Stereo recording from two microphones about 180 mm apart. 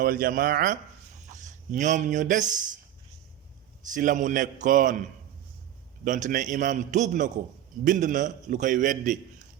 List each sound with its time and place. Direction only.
0.0 s a man's voice: 50° right (ahead or behind)
3.9 s a man's voice: 45° right (ahead or behind)
6.1 s a man's voice: 45° right (ahead or behind)